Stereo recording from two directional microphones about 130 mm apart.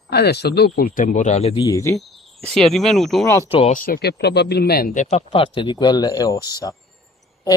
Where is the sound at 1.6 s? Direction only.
25° left (ahead or behind).